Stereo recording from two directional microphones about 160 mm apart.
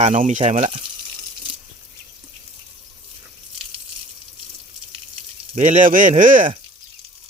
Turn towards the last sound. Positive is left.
turn(degrees=-55)  # may be behind; listen again after turning